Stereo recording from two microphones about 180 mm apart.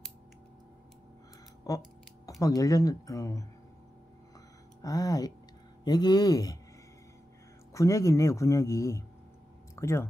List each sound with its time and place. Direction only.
1.7 s a sound: 20° left (ahead or behind)
2.4 s speech: 20° left (ahead or behind)
4.8 s speech: 20° left (ahead or behind)
7.7 s speech: 15° left (ahead or behind)